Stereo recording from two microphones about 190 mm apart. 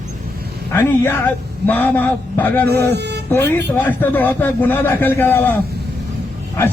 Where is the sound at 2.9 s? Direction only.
60° right (ahead or behind).